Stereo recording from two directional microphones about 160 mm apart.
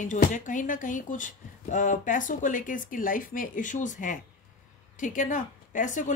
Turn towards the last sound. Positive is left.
turn(degrees=50)  # may be behind; listen again after turning